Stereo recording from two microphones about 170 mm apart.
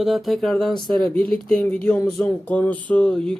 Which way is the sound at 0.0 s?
Centre (ahead or behind).